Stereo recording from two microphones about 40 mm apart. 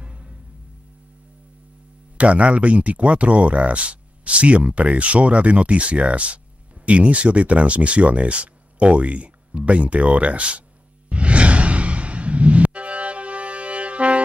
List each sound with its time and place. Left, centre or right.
2.1 s speech: right
11.1 s music: right